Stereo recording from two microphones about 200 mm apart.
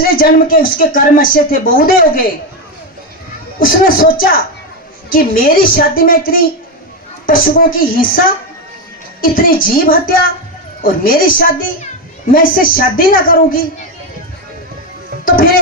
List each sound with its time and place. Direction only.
0.0 s speech: 45° left (ahead or behind)
3.6 s speech: 45° left (ahead or behind)
9.2 s speech: 45° left (ahead or behind)